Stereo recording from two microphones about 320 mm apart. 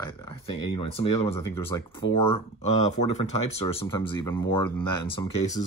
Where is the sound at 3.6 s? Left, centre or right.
Centre.